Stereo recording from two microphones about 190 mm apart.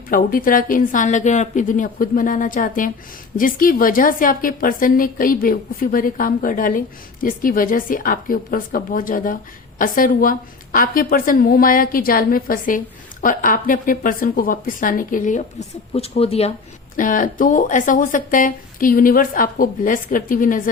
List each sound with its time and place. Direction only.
0.1 s a woman's voice: 45° left (ahead or behind)
15.9 s speech: 30° left (ahead or behind)
17.0 s a woman's voice: 45° left (ahead or behind)